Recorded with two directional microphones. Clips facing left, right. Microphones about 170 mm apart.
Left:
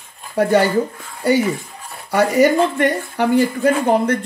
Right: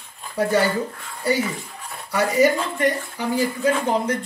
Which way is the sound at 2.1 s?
65° left (ahead or behind).